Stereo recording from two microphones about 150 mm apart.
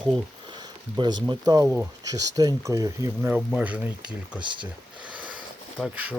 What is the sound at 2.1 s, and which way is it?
Speech, 25° right (ahead or behind).